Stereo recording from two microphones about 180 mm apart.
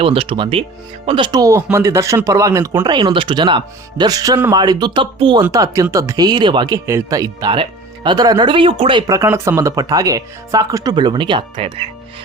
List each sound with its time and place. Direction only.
0.0 s speech: 30° right (ahead or behind)